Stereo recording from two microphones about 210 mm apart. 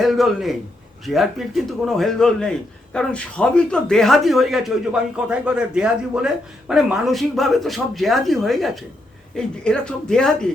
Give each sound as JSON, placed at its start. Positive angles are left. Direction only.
{"t": 0.0, "sound": "a man's voice", "side_deg": 0}